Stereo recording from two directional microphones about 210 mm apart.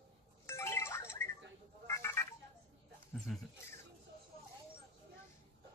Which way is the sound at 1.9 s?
10° left (ahead or behind).